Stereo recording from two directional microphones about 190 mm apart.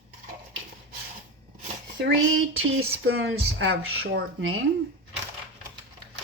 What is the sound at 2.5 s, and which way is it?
Speech, 90° right.